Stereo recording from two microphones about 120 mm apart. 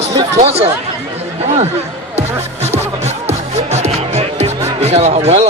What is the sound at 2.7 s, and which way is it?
Music, 65° right (ahead or behind).